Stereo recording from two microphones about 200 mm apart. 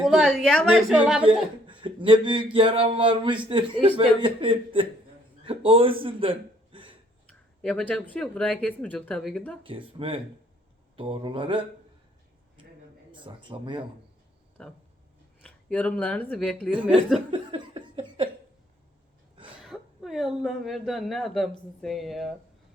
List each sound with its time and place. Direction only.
0.0 s a woman's voice: centre (ahead or behind)
1.2 s a man's voice: 25° right (ahead or behind)
5.4 s a sound: 25° right (ahead or behind)
7.6 s a woman's voice: 5° left (ahead or behind)
9.6 s a man's voice: 25° right (ahead or behind)
13.1 s speech: 25° right (ahead or behind)
14.6 s a woman's voice: centre (ahead or behind)
17.3 s laughter: 25° right (ahead or behind)
19.6 s a woman's voice: centre (ahead or behind)